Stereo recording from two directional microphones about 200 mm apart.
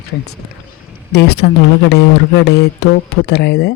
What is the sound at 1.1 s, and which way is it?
Speech, 55° left (ahead or behind).